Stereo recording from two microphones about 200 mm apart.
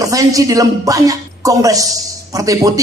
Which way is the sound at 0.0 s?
15° right (ahead or behind).